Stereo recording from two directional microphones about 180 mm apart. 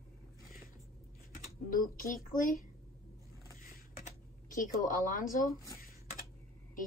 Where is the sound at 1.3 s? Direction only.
50° left (ahead or behind).